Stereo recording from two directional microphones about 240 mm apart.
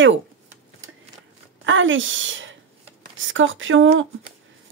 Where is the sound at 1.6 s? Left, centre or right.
Right.